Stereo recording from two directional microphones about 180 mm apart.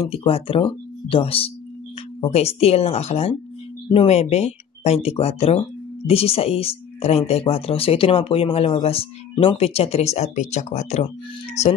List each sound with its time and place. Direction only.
0.1 s speech: 30° left (ahead or behind)